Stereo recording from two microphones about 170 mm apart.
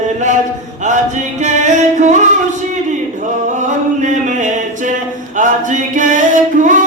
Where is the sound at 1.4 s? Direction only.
45° right (ahead or behind).